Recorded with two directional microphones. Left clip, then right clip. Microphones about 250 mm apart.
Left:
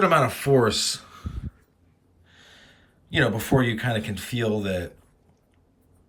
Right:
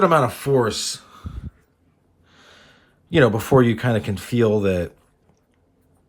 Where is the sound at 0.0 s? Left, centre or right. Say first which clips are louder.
Right 3 dB; centre.